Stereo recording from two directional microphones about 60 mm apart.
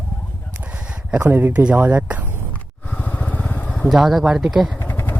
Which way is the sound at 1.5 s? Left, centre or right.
Right.